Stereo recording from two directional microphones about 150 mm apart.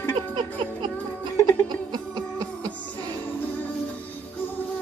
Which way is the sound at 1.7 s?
25° right (ahead or behind).